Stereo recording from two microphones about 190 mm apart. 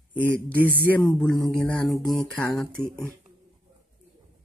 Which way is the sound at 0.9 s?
15° left (ahead or behind).